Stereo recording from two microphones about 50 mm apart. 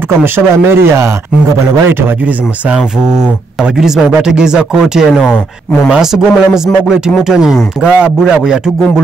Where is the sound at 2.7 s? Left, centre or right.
Centre.